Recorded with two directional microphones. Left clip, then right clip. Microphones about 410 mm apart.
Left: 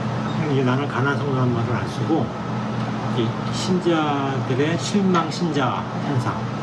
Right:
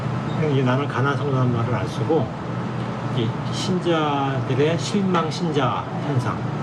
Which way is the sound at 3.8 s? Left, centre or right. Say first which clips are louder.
Even; centre.